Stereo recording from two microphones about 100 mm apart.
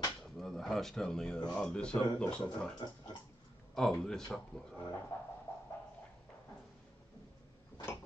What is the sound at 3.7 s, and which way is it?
Speech, 5° left (ahead or behind).